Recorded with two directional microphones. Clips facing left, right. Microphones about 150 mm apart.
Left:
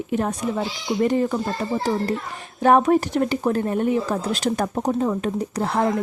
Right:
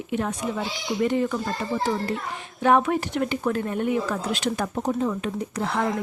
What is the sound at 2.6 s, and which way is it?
A woman's voice, 40° left (ahead or behind).